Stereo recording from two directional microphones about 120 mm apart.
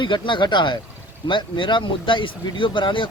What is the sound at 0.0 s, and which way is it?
A man's voice, 40° left (ahead or behind).